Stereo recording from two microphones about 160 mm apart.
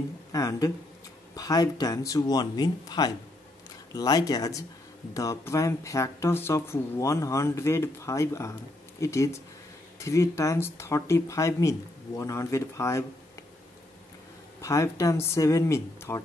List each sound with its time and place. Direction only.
0.3 s speech: 20° left (ahead or behind)
14.6 s speech: 20° left (ahead or behind)